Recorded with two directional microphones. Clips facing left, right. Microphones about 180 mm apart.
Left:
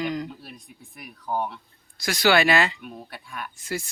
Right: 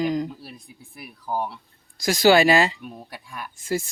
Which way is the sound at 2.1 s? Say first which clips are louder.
Right 4 dB; 40° right (ahead or behind).